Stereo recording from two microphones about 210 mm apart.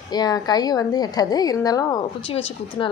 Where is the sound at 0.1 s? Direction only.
20° left (ahead or behind).